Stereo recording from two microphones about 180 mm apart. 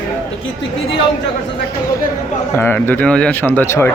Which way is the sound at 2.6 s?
10° left (ahead or behind).